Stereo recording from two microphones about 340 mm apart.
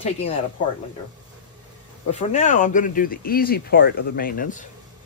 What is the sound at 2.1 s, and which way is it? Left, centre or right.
Speech, centre.